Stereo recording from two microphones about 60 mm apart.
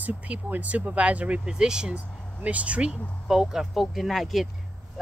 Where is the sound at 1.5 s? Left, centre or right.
Centre.